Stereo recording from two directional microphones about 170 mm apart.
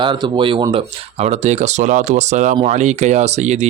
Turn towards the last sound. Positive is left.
turn(degrees=-40)  # may be behind; listen again after turning